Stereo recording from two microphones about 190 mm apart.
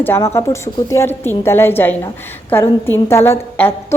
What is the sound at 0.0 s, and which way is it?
A woman's voice, 10° left (ahead or behind).